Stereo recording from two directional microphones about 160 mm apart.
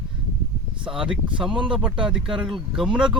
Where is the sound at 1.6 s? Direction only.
5° right (ahead or behind).